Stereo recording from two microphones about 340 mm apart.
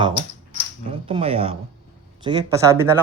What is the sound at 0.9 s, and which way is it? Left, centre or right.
A man's voice, centre.